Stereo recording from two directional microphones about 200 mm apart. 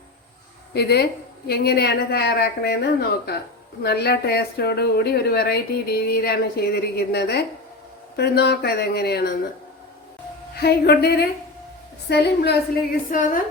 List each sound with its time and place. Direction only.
0.7 s speech: 55° left (ahead or behind)
3.8 s speech: 55° left (ahead or behind)
10.5 s speech: 55° left (ahead or behind)